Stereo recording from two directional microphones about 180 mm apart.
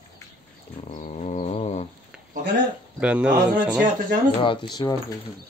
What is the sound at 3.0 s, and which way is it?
Speech, 5° right (ahead or behind).